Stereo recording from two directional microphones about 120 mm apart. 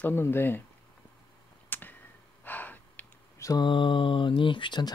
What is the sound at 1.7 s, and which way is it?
Tick-tock, 15° left (ahead or behind).